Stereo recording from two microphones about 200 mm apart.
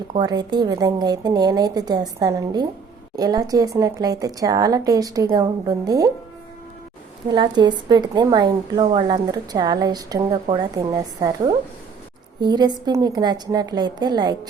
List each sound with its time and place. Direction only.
0.2 s a woman's voice: 20° right (ahead or behind)
7.3 s a woman's voice: 20° right (ahead or behind)